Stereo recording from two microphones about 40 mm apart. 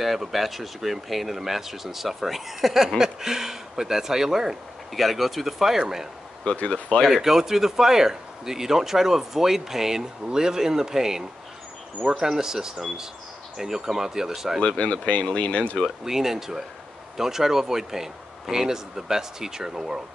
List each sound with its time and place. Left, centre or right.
0.0 s speech: centre
7.1 s speech: centre
14.8 s speech: left
16.0 s speech: centre